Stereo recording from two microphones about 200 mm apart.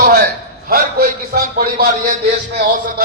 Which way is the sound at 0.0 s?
50° right (ahead or behind).